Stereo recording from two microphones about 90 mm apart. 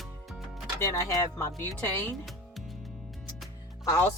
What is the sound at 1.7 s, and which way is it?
Speech, 25° left (ahead or behind).